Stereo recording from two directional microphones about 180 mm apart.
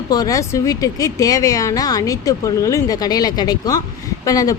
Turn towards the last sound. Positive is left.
turn(degrees=20)  # may be behind; listen again after turning